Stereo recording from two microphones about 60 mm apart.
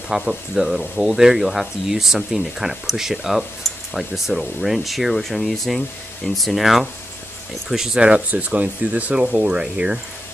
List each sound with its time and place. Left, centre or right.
0.1 s speech: centre